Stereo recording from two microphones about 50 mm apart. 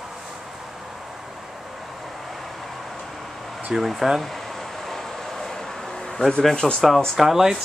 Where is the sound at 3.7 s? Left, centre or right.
Centre.